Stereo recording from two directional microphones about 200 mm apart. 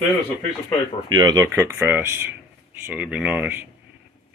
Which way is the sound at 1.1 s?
20° right (ahead or behind).